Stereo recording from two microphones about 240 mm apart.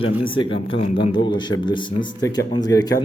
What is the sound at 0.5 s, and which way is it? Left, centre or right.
A man's voice, left.